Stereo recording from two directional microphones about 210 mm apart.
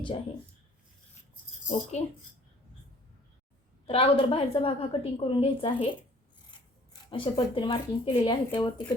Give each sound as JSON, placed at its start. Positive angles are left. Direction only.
{"t": 1.9, "sound": "speech", "side_deg": 35}
{"t": 3.8, "sound": "a woman's voice", "side_deg": 25}
{"t": 7.1, "sound": "a woman's voice", "side_deg": 25}